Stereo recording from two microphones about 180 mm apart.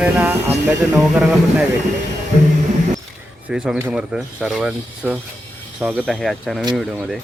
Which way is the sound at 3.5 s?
5° right (ahead or behind).